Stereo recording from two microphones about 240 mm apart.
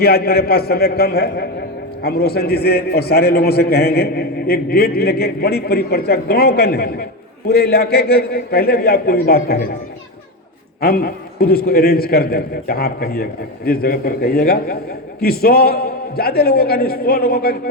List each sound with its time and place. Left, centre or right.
0.0 s a man's voice: left
10.8 s a man's voice: left